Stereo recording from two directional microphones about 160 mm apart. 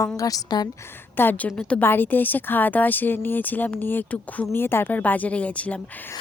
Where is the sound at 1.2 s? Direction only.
10° left (ahead or behind).